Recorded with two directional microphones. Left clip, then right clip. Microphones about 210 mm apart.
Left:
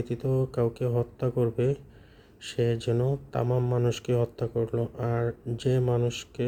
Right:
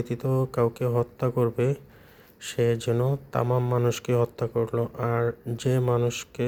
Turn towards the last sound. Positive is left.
turn(degrees=0)  # may be behind; listen again after turning